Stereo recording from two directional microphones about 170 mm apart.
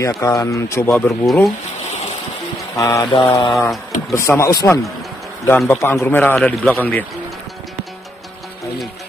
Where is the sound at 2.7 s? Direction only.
20° left (ahead or behind).